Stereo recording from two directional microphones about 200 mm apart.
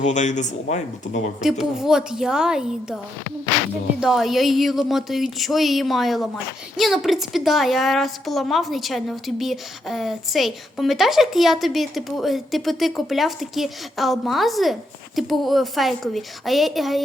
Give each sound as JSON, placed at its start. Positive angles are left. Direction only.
{"t": 0.0, "sound": "speech", "side_deg": 35}
{"t": 1.4, "sound": "a woman's voice", "side_deg": 0}
{"t": 4.0, "sound": "a woman's voice", "side_deg": 0}